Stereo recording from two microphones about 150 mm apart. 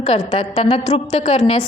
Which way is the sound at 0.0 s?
35° left (ahead or behind).